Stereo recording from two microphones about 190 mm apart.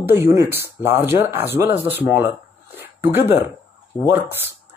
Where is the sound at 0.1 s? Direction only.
15° right (ahead or behind).